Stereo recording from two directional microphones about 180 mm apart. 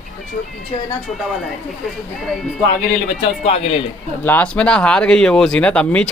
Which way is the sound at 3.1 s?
35° left (ahead or behind).